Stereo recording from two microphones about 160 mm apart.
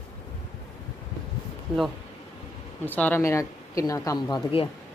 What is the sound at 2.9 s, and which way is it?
Speech, 10° left (ahead or behind).